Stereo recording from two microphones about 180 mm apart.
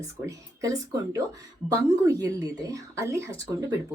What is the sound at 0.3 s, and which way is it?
Speech, 20° right (ahead or behind).